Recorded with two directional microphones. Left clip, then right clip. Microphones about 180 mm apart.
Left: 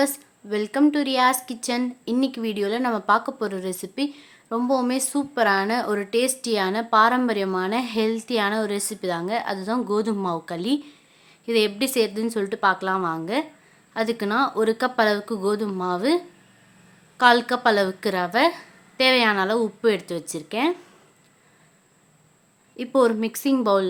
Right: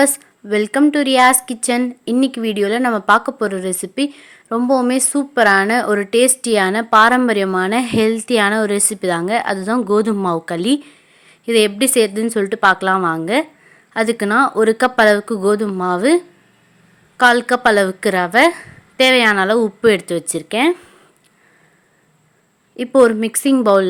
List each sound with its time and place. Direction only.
0.0 s a woman's voice: 30° right (ahead or behind)
22.8 s a woman's voice: 25° right (ahead or behind)